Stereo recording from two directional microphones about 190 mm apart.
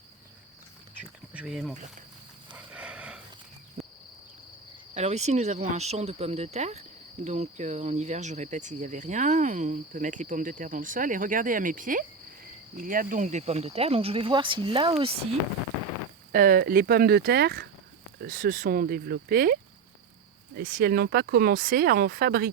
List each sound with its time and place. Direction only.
1.3 s speech: 5° right (ahead or behind)
2.7 s a sound: 5° right (ahead or behind)
4.9 s cricket: 35° right (ahead or behind)
16.3 s speech: 45° right (ahead or behind)
18.2 s speech: 45° right (ahead or behind)
20.6 s speech: 45° right (ahead or behind)